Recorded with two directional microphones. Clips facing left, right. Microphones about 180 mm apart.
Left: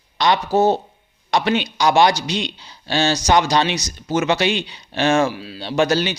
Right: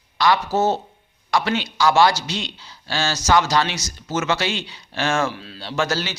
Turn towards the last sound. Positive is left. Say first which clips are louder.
# left 6 dB
turn(degrees=20)  # may be behind; listen again after turning